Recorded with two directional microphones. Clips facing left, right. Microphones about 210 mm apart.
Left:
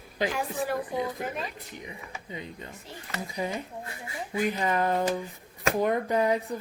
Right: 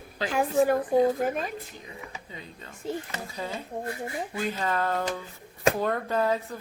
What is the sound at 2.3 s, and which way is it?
Speech, 20° left (ahead or behind).